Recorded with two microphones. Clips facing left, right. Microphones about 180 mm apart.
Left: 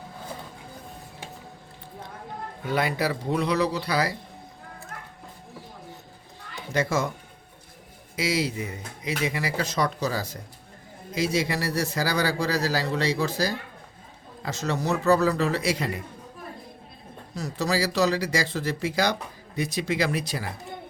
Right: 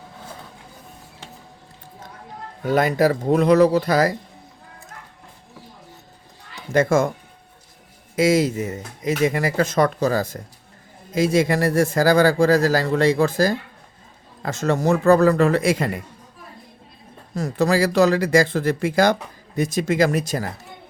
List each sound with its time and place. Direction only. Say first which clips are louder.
2.6 s a man's voice: right 8 dB; 45° right (ahead or behind)
6.7 s a man's voice: right 8 dB; 50° right (ahead or behind)
8.1 s a man's voice: right 9 dB; 45° right (ahead or behind)
17.3 s a man's voice: right 7 dB; 50° right (ahead or behind)